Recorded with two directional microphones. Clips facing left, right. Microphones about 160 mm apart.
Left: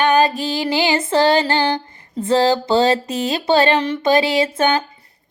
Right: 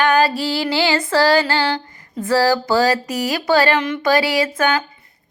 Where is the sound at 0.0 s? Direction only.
20° left (ahead or behind).